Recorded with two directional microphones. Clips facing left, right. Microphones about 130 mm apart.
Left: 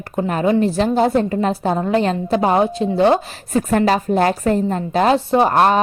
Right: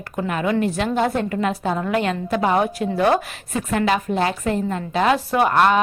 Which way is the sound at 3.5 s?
40° left (ahead or behind).